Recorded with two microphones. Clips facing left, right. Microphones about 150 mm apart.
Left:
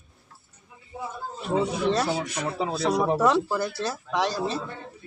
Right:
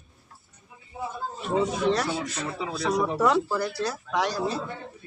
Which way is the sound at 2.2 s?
15° left (ahead or behind).